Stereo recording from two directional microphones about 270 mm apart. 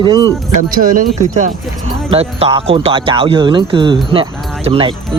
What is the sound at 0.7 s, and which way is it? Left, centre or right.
Speech, right.